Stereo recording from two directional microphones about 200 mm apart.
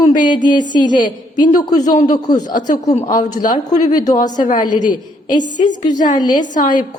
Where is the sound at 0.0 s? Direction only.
20° left (ahead or behind).